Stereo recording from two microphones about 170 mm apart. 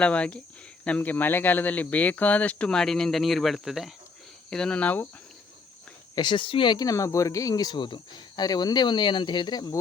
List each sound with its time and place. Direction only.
0.0 s speech: 5° left (ahead or behind)
6.1 s speech: 30° left (ahead or behind)